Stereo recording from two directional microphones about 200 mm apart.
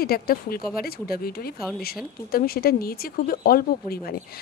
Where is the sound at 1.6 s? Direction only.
Centre (ahead or behind).